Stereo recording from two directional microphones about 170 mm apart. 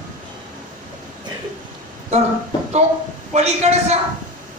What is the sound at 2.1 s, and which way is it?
Speech, 40° right (ahead or behind).